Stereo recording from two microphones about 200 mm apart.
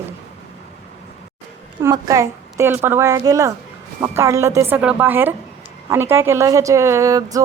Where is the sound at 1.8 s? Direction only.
15° right (ahead or behind).